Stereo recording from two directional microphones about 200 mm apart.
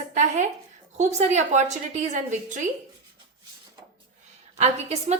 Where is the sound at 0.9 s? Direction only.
35° right (ahead or behind).